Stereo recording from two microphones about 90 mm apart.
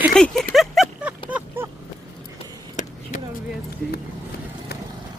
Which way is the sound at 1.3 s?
25° right (ahead or behind).